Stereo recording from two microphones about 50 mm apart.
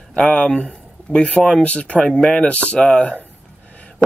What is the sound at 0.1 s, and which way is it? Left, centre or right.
Speech, centre.